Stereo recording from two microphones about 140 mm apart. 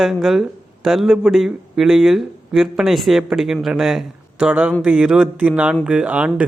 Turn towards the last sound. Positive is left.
turn(degrees=-10)  # may be behind; listen again after turning